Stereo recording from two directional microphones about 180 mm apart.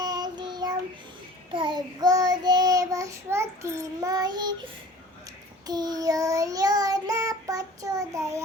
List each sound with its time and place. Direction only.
0.0 s child singing: 20° right (ahead or behind)
5.6 s child singing: 20° right (ahead or behind)